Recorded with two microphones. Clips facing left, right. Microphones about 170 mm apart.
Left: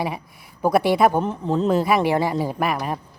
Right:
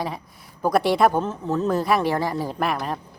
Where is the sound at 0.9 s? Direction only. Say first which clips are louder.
Left 1 dB; 5° left (ahead or behind).